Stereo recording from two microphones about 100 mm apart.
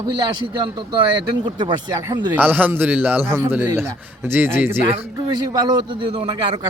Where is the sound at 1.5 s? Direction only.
50° right (ahead or behind).